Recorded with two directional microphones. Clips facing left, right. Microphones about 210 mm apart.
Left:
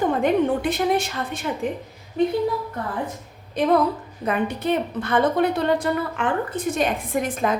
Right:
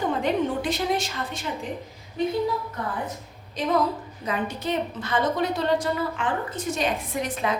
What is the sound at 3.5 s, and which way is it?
A woman's voice, 60° left (ahead or behind).